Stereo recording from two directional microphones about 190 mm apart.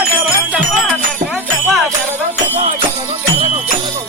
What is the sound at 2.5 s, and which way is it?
Jingle bell, 30° right (ahead or behind).